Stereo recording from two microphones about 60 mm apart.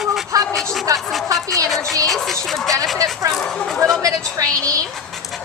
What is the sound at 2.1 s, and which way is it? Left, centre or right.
Music, centre.